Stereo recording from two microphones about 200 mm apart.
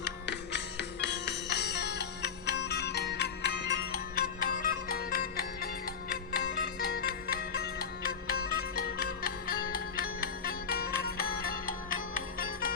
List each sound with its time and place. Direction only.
0.0 s music: 60° left (ahead or behind)